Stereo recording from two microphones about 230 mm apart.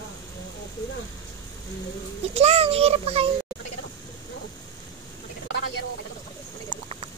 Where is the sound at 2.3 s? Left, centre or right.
Right.